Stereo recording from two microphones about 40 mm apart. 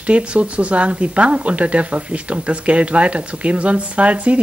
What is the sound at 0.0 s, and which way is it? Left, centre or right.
Speech, right.